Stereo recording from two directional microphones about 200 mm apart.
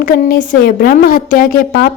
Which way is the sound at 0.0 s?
45° left (ahead or behind).